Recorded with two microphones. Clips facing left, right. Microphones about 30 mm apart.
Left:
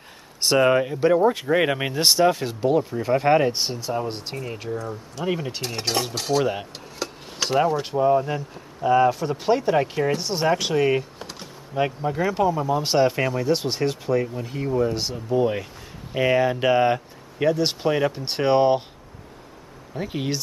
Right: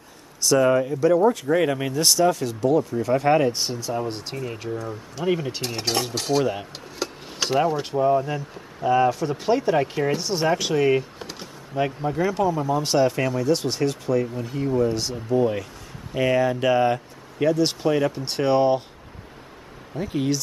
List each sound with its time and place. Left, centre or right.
0.4 s speech: left; by 6.4 s centre
6.4 s speech: centre
7.0 s speech: centre
15.3 s speech: centre
20.0 s speech: centre